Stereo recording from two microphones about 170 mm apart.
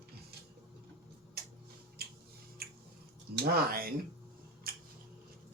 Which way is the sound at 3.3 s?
70° right (ahead or behind).